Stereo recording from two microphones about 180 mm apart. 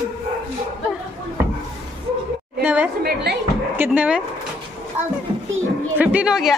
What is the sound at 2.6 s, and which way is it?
Speech, 10° right (ahead or behind).